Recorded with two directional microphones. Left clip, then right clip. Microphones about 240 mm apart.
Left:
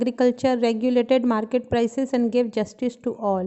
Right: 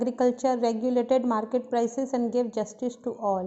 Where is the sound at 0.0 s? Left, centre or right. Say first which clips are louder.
Left 4 dB; left.